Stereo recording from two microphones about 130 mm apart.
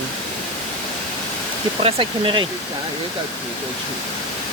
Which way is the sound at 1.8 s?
40° right (ahead or behind).